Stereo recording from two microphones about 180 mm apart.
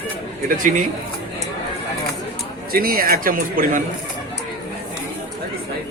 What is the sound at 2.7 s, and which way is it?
Speech, 55° right (ahead or behind).